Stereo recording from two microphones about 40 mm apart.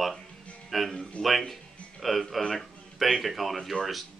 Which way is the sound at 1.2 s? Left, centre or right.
Left.